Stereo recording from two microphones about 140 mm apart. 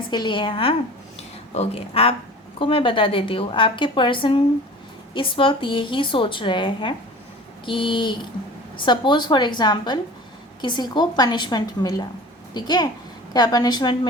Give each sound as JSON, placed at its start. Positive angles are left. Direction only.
{"t": 0.1, "sound": "a woman's voice", "side_deg": 35}